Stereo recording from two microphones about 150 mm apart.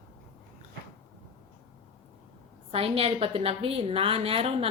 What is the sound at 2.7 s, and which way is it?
A woman's voice, 40° right (ahead or behind).